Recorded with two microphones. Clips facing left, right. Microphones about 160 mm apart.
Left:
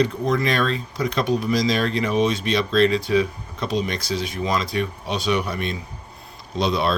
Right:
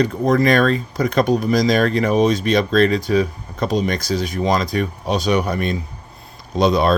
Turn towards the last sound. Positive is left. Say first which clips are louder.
# right 6 dB
turn(degrees=-45)  # may be behind; listen again after turning